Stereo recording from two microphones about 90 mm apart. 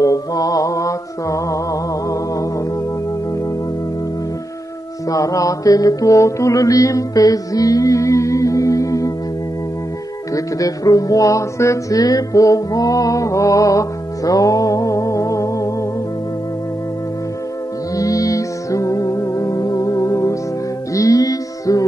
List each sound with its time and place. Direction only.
0.0 s music: 40° left (ahead or behind)
5.1 s music: 40° left (ahead or behind)
10.3 s music: 40° left (ahead or behind)
17.9 s music: 40° left (ahead or behind)